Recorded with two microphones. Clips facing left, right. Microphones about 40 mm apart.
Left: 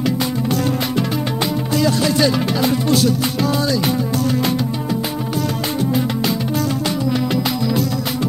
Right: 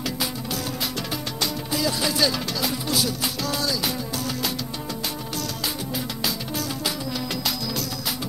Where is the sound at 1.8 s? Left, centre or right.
Centre.